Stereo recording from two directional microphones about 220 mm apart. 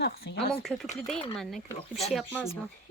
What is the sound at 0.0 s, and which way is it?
Speech, 45° left (ahead or behind).